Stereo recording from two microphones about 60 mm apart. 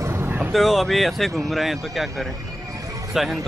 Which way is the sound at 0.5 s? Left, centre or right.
Centre.